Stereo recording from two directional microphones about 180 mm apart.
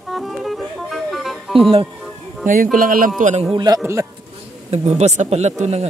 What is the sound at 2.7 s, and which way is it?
Speech, 50° right (ahead or behind).